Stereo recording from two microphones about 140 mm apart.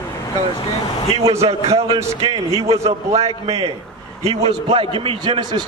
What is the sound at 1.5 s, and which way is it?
Speech, 45° right (ahead or behind).